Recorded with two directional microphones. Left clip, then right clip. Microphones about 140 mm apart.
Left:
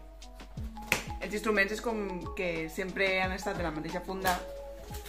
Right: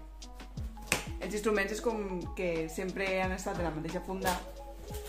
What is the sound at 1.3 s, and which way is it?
Speech, 20° right (ahead or behind).